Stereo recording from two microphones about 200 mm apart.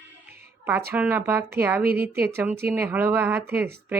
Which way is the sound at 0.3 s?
10° right (ahead or behind).